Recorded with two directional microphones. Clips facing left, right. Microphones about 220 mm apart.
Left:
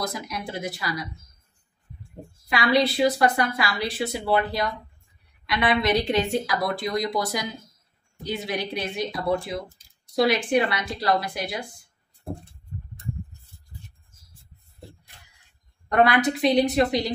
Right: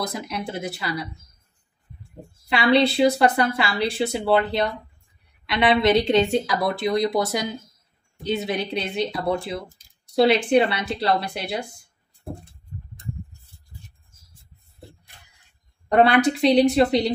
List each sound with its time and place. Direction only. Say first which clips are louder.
0.1 s a woman's voice: right 3 dB; 25° right (ahead or behind)
2.5 s a woman's voice: right 3 dB; 25° right (ahead or behind)
15.9 s a woman's voice: right 3 dB; 30° right (ahead or behind)